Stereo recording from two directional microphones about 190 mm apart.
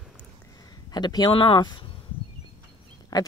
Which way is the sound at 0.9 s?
20° left (ahead or behind).